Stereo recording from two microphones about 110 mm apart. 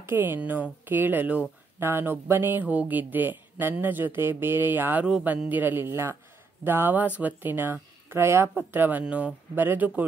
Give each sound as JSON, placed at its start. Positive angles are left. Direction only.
{"t": 0.0, "sound": "speech", "side_deg": -20}